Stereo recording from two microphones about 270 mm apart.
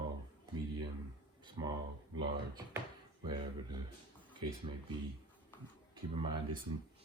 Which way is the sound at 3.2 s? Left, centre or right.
Centre.